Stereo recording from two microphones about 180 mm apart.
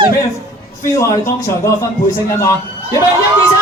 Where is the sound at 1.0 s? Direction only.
15° left (ahead or behind).